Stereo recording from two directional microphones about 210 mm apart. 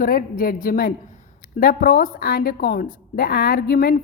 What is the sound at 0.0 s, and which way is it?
A woman's voice, 40° left (ahead or behind).